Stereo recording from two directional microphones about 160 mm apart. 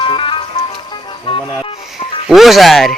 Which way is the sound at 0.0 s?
35° left (ahead or behind).